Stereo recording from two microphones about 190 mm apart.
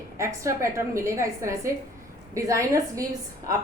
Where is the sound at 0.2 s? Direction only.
15° right (ahead or behind).